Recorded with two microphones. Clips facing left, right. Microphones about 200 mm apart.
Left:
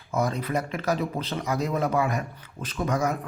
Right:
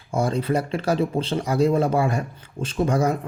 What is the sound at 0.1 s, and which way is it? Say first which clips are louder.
Speech: right 4 dB; 30° right (ahead or behind).